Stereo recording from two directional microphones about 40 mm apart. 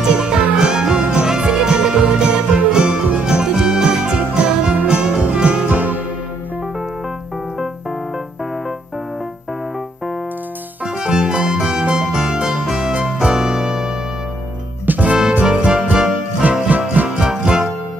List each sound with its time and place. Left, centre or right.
0.0 s music: centre
5.7 s music: right
10.9 s music: right
14.9 s music: right
15.4 s music: right
16.5 s music: right
17.1 s music: centre